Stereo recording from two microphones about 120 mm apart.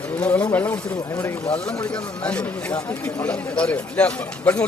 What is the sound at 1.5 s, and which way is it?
Speech, 5° left (ahead or behind).